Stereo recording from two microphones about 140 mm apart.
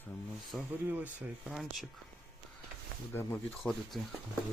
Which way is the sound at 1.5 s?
Centre (ahead or behind).